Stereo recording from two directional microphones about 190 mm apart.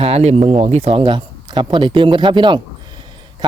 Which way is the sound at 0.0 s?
35° right (ahead or behind).